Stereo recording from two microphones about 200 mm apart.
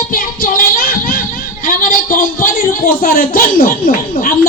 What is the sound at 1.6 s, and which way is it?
A man's voice, 45° left (ahead or behind).